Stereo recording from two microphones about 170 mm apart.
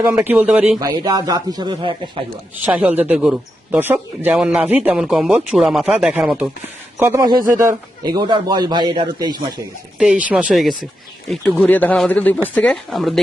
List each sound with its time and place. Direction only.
0.0 s speech: 10° right (ahead or behind)
0.8 s speech: 20° right (ahead or behind)
2.6 s speech: 10° right (ahead or behind); by 9.5 s 25° right (ahead or behind)
10.0 s speech: 5° right (ahead or behind)